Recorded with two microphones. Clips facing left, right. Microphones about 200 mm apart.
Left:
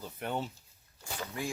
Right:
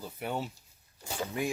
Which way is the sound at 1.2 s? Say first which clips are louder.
Right 5 dB; 20° right (ahead or behind).